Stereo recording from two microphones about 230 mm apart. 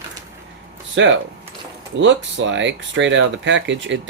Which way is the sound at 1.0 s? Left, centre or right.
Right.